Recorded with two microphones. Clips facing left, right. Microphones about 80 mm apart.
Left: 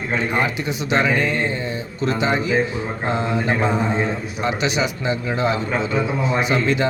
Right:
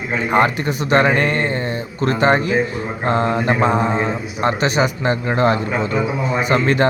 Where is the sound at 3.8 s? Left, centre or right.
Centre.